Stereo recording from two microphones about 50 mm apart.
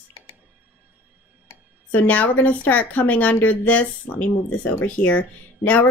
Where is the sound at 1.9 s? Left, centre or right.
Left.